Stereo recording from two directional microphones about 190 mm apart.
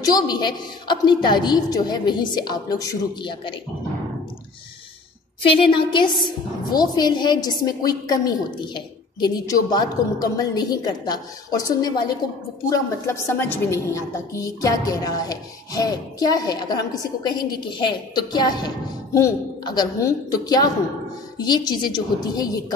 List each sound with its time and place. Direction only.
0.0 s a woman's voice: 20° left (ahead or behind)
5.6 s a woman's voice: 25° left (ahead or behind)